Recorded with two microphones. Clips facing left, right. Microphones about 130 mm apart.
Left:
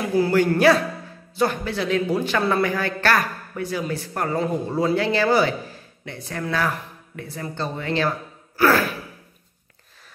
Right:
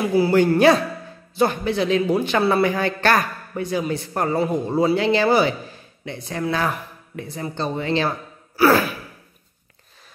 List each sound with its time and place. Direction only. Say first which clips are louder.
0.3 s a man's voice: right 2 dB; 20° right (ahead or behind)
4.4 s a man's voice: right 3 dB; 10° right (ahead or behind)